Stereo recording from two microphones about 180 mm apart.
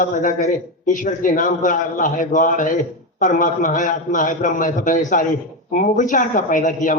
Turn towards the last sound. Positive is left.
turn(degrees=45)  # may be behind; listen again after turning